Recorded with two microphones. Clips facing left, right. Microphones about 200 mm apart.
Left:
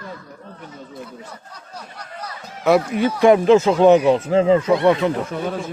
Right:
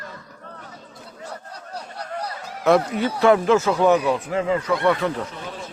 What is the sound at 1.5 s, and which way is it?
Speech, 30° right (ahead or behind).